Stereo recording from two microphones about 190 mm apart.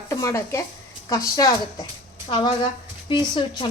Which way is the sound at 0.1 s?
15° left (ahead or behind).